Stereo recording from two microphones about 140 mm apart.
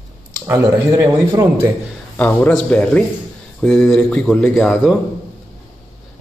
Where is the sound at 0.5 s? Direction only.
25° right (ahead or behind).